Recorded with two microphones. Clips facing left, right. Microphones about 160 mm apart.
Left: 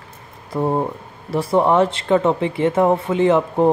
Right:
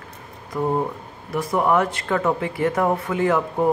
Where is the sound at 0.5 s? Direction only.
30° left (ahead or behind).